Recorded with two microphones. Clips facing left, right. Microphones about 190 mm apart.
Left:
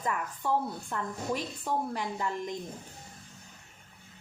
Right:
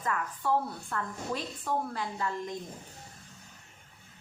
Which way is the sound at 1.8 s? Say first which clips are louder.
Left 1 dB; 15° left (ahead or behind).